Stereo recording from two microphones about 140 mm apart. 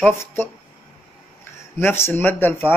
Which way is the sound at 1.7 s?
20° left (ahead or behind).